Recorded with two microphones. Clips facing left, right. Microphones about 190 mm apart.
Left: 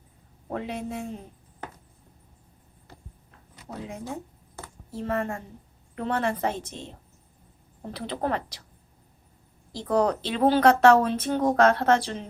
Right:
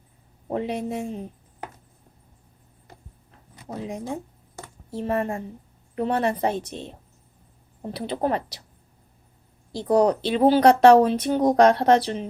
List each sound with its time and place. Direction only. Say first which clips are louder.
0.5 s a woman's voice: right 5 dB; 20° right (ahead or behind)
3.7 s a woman's voice: right 5 dB; 15° right (ahead or behind)
9.8 s speech: right 4 dB; 10° right (ahead or behind)